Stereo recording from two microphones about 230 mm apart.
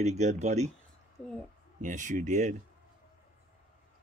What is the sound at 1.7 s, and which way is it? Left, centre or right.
Speech, right.